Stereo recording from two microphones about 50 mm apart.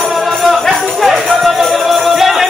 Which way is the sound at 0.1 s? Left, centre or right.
Centre.